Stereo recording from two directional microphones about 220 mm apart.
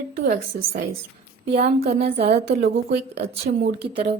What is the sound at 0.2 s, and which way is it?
Speech, 45° right (ahead or behind).